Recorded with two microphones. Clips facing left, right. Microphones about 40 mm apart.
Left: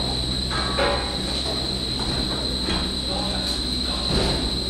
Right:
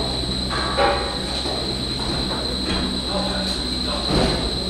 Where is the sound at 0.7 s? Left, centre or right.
Centre.